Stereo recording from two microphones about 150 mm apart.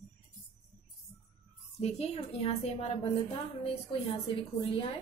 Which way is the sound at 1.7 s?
45° left (ahead or behind).